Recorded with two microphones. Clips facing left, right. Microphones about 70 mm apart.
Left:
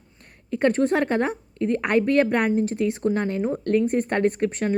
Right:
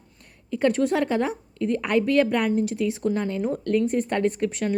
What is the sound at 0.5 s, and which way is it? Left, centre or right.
Speech, left.